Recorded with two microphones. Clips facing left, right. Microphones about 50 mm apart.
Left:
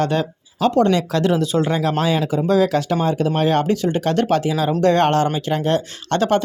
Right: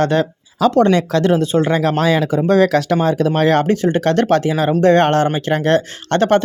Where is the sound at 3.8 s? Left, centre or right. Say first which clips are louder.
Right 4 dB; right.